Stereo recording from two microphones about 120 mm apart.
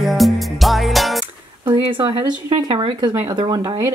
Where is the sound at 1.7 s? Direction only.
45° right (ahead or behind).